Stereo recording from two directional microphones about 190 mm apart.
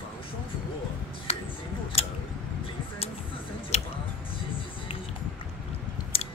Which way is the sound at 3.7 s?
35° left (ahead or behind).